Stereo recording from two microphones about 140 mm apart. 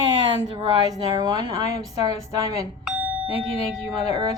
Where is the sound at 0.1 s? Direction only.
30° right (ahead or behind).